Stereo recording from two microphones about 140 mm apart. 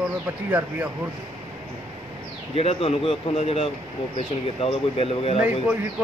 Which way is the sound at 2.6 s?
45° left (ahead or behind).